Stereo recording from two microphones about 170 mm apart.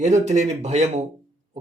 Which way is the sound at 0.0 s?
45° right (ahead or behind).